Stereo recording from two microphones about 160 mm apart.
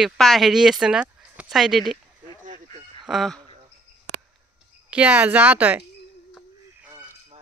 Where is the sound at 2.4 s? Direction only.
50° right (ahead or behind).